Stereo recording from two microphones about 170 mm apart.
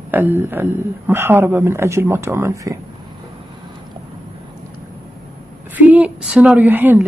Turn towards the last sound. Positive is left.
turn(degrees=-10)  # may be behind; listen again after turning